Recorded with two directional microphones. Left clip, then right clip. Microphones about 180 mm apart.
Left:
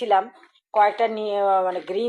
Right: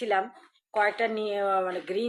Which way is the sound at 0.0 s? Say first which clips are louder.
Left 7 dB; 15° left (ahead or behind).